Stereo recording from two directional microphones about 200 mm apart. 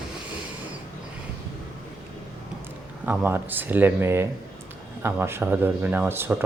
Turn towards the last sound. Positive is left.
turn(degrees=-10)  # may be behind; listen again after turning